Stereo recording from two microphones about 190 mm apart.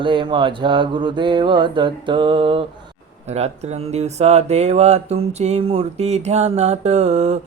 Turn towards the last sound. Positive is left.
turn(degrees=-35)  # may be behind; listen again after turning